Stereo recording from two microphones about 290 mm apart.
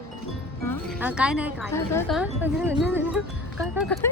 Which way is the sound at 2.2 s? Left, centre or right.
Centre.